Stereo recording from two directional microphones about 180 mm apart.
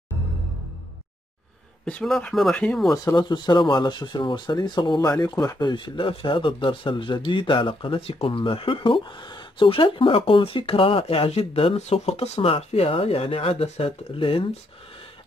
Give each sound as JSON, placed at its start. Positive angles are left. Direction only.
{"t": 1.9, "sound": "speech", "side_deg": 5}
{"t": 2.9, "sound": "speech", "side_deg": 20}